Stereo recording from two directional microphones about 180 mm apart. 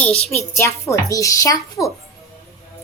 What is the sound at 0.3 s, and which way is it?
Speech, 15° left (ahead or behind).